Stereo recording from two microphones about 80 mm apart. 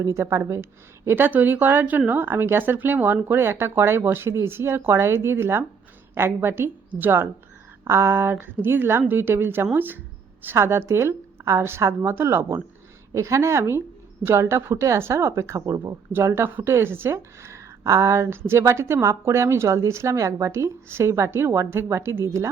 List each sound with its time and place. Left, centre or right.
0.0 s a woman's voice: right